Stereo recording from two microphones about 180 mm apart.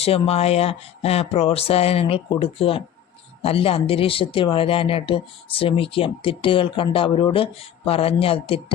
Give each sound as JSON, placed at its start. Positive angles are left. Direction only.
{"t": 0.0, "sound": "speech", "side_deg": 35}